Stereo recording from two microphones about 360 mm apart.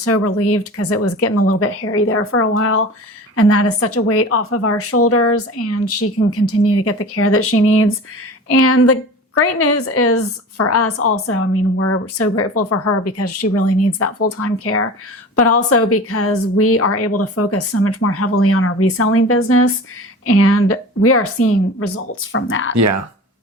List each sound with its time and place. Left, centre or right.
0.0 s a woman's voice: left
22.7 s speech: right